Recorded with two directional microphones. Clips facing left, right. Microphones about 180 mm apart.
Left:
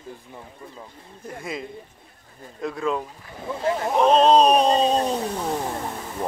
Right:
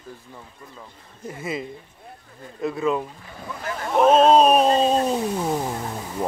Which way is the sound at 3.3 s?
25° left (ahead or behind).